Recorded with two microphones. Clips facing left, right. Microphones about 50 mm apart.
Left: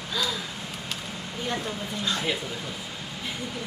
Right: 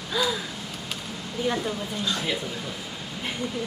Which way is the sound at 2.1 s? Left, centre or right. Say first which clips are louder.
Left 1 dB; centre.